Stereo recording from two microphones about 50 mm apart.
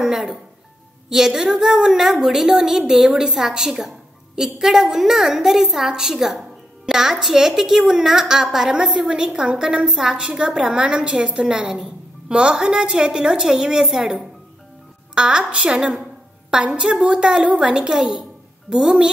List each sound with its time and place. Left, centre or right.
0.0 s music: centre
1.0 s a woman's voice: centre
15.1 s a woman's voice: centre